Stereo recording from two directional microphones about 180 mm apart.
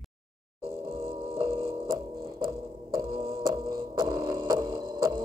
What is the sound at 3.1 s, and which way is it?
Music, 35° right (ahead or behind).